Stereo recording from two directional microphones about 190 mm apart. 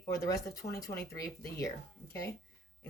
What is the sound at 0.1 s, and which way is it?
Speech, 15° left (ahead or behind).